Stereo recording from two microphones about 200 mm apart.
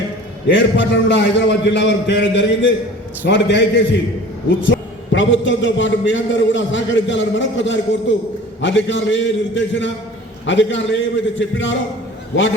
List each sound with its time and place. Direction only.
0.4 s a man's voice: 65° left (ahead or behind)